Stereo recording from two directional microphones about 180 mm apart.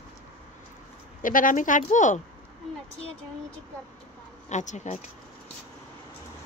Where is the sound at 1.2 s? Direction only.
50° left (ahead or behind).